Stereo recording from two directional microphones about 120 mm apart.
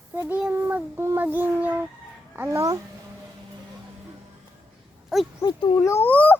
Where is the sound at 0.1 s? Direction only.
15° right (ahead or behind).